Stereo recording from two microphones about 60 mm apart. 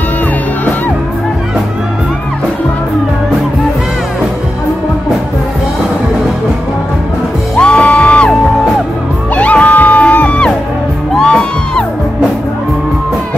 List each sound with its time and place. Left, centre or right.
7.5 s music: centre
9.3 s music: left